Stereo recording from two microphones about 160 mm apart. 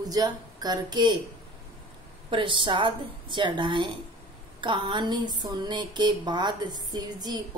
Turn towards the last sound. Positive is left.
turn(degrees=-25)  # may be behind; listen again after turning